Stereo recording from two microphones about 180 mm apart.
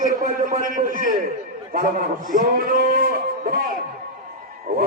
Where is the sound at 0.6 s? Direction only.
50° right (ahead or behind).